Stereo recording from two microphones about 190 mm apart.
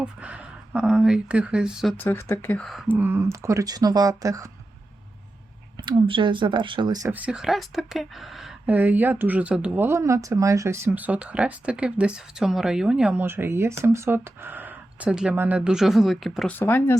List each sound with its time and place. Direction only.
0.0 s speech: 5° right (ahead or behind)
2.0 s speech: 15° left (ahead or behind)
3.0 s speech: 15° right (ahead or behind)
5.8 s speech: 25° right (ahead or behind)
7.1 s speech: 5° right (ahead or behind)
16.6 s speech: 10° left (ahead or behind)